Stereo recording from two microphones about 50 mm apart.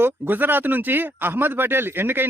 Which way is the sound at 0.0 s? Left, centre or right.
Right.